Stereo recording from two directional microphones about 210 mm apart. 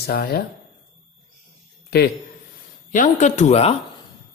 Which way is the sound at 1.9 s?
50° left (ahead or behind).